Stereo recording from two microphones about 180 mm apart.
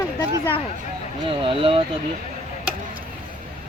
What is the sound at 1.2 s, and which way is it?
Speech, 30° right (ahead or behind).